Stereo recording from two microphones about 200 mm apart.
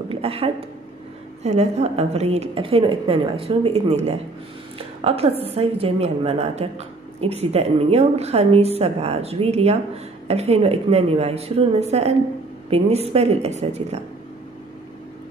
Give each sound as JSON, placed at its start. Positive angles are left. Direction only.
{"t": 0.1, "sound": "a woman's voice", "side_deg": -30}